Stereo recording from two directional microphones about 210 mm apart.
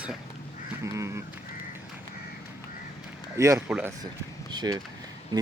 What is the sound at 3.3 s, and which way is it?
Speech, 15° right (ahead or behind).